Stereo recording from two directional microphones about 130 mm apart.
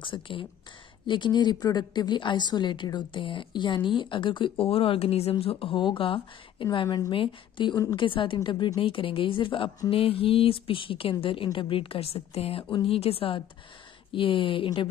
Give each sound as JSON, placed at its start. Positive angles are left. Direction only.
{"t": 0.0, "sound": "a woman's voice", "side_deg": 40}